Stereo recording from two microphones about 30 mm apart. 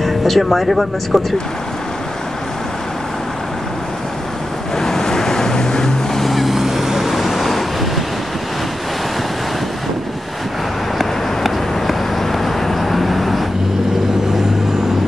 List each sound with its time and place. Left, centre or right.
0.0 s speech: centre
4.7 s vehicle: centre
6.2 s vehicle: centre
11.0 s vehicle: centre